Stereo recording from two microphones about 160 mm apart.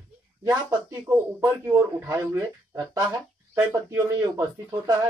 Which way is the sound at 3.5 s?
15° right (ahead or behind).